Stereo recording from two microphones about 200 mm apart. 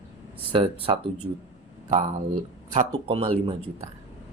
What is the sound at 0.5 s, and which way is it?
Speech, 25° right (ahead or behind).